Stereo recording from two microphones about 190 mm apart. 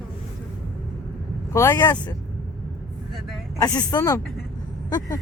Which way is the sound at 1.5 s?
15° left (ahead or behind).